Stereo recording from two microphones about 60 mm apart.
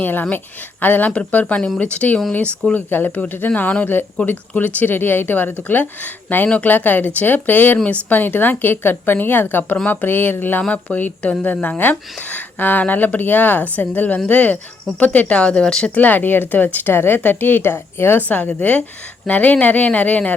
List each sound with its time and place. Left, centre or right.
0.0 s speech: left
1.1 s speech: centre; by 10.6 s left
10.6 s speech: centre
10.9 s speech: left
16.0 s speech: left
18.3 s speech: left